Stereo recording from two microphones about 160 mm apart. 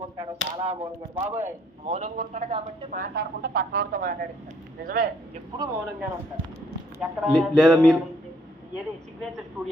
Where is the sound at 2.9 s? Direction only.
75° right (ahead or behind); by 4.2 s 60° right (ahead or behind).